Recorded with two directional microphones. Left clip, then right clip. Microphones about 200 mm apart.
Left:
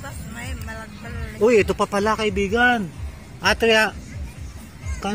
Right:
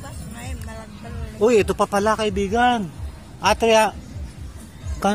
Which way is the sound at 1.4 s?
10° right (ahead or behind).